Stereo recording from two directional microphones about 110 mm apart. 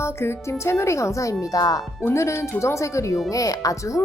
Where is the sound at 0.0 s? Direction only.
25° left (ahead or behind).